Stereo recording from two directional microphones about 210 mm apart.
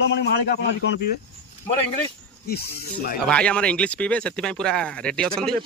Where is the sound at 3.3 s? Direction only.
5° left (ahead or behind).